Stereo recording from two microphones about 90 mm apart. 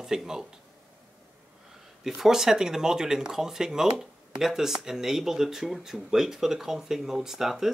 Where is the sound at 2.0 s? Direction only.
5° right (ahead or behind).